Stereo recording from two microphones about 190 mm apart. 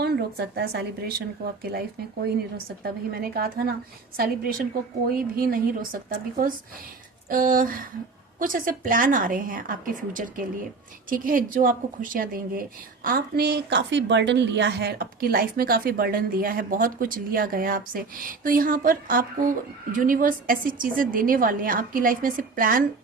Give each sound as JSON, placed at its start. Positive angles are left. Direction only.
{"t": 0.0, "sound": "a woman's voice", "side_deg": -55}
{"t": 2.8, "sound": "a woman's voice", "side_deg": -55}